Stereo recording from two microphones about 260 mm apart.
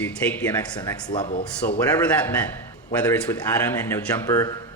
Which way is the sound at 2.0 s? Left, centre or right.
Centre.